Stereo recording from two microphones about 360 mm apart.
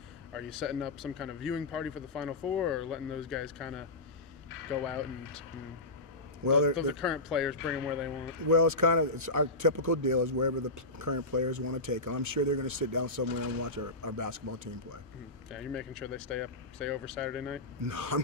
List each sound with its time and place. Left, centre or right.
0.3 s speech: centre
4.8 s speech: centre
6.4 s a man's voice: right
7.0 s speech: centre
8.5 s a man's voice: right
15.5 s speech: centre
17.8 s a man's voice: right